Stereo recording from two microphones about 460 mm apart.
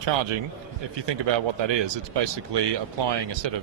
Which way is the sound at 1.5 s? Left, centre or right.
Right.